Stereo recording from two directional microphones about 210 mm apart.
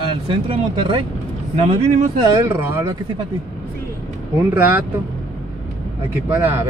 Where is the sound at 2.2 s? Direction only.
15° right (ahead or behind).